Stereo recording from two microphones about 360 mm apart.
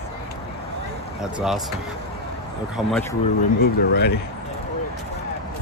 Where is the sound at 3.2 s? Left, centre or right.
Left.